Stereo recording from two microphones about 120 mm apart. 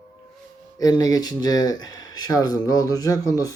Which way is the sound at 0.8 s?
30° left (ahead or behind).